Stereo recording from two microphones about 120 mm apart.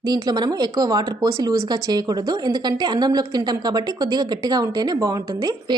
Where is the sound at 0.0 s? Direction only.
35° right (ahead or behind).